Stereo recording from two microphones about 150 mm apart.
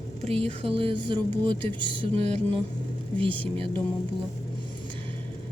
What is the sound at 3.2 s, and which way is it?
Speech, 10° left (ahead or behind).